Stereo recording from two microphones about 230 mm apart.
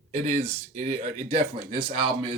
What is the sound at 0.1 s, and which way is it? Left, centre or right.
Speech, right.